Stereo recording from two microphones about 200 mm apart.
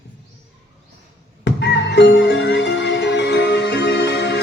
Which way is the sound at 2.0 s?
60° left (ahead or behind).